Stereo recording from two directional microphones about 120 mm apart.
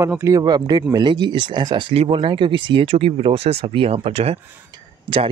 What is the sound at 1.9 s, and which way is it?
Speech, 50° right (ahead or behind).